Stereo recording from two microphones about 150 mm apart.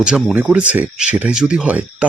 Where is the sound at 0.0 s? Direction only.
5° right (ahead or behind).